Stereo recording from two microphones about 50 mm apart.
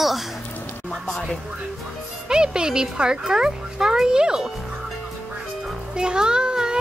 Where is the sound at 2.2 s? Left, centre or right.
Centre.